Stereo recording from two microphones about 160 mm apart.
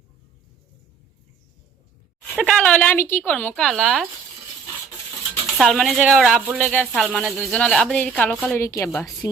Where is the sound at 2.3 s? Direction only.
5° left (ahead or behind).